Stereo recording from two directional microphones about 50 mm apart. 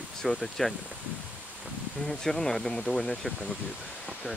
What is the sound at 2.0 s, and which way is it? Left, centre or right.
Speech, centre.